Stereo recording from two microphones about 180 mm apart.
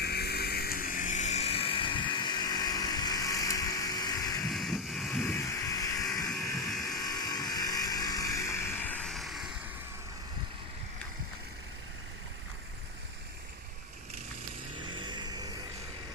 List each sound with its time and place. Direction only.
0.0 s a sound: 65° left (ahead or behind); by 4.4 s 20° left (ahead or behind)
4.4 s vehicle: centre (ahead or behind)
5.3 s vehicle: 15° left (ahead or behind)
6.2 s a sound: 5° left (ahead or behind)
6.8 s vehicle: 20° left (ahead or behind); by 9.5 s centre (ahead or behind)
14.8 s vehicle: 25° right (ahead or behind)